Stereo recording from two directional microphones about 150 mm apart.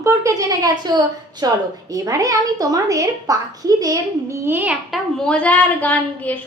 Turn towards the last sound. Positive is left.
turn(degrees=10)  # may be behind; listen again after turning